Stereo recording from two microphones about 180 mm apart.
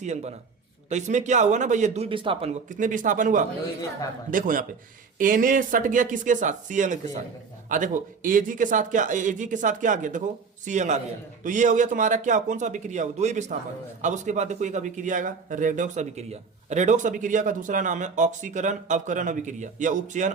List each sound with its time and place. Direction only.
0.0 s speech: 40° right (ahead or behind)